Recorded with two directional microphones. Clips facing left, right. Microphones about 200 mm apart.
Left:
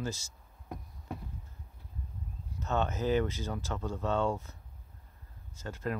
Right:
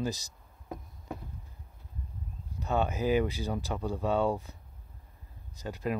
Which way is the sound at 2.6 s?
15° right (ahead or behind).